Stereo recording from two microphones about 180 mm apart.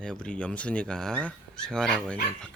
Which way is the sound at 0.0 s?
5° left (ahead or behind).